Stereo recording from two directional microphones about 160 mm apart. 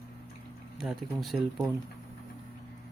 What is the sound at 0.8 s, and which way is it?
Speech, centre (ahead or behind).